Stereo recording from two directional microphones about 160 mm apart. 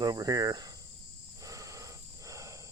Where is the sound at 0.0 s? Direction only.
25° right (ahead or behind).